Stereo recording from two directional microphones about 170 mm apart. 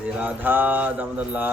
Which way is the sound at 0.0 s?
10° right (ahead or behind).